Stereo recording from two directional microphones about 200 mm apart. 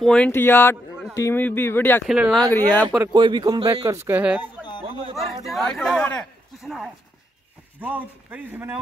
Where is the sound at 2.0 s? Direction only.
5° right (ahead or behind).